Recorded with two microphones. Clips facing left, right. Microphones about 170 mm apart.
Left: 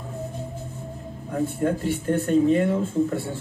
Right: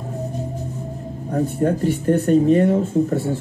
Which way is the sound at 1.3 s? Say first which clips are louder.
Right 4 dB; 40° right (ahead or behind).